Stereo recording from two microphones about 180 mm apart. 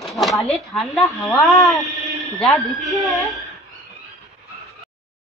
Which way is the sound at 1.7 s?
Centre (ahead or behind).